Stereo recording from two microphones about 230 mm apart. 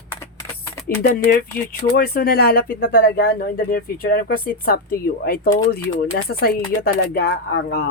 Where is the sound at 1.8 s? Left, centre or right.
Left.